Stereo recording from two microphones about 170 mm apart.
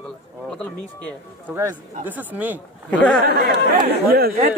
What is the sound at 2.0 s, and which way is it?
Speech, 10° right (ahead or behind).